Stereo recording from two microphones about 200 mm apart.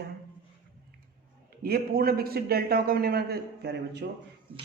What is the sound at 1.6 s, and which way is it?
A man's voice, 50° right (ahead or behind).